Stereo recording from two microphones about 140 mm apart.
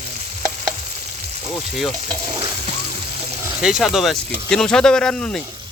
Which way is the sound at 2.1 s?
35° right (ahead or behind).